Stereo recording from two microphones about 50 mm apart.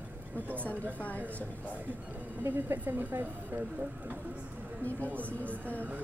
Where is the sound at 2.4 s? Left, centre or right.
Right.